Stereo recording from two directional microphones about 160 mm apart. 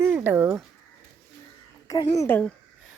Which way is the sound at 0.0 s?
15° right (ahead or behind).